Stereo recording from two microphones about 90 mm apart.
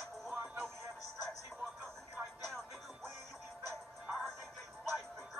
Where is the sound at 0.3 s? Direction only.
20° right (ahead or behind).